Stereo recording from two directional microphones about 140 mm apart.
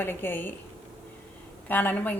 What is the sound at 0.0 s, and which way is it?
Speech, 15° left (ahead or behind).